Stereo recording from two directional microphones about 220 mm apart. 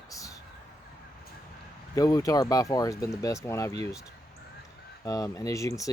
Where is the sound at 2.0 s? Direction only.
15° left (ahead or behind).